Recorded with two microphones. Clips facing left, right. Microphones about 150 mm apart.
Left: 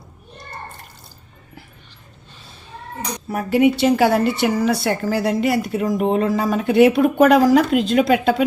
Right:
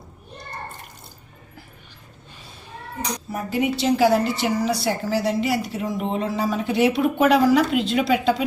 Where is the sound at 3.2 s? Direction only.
65° left (ahead or behind).